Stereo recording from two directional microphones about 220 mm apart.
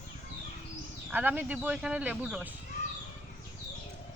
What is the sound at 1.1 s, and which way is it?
Speech, 10° right (ahead or behind).